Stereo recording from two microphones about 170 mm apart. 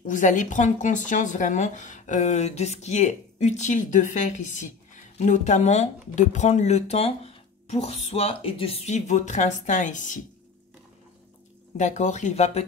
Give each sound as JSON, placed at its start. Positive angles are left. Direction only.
{"t": 0.0, "sound": "speech", "side_deg": 50}
{"t": 11.7, "sound": "speech", "side_deg": 45}